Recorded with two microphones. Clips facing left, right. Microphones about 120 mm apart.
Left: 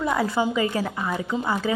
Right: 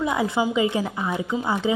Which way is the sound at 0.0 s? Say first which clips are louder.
Even; 15° right (ahead or behind).